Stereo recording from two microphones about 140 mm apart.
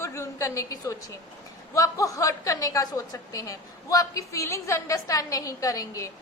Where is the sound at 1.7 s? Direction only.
25° left (ahead or behind).